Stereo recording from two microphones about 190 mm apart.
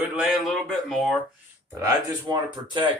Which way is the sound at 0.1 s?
Centre (ahead or behind).